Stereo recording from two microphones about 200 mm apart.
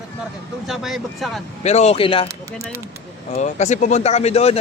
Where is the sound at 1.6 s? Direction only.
35° left (ahead or behind).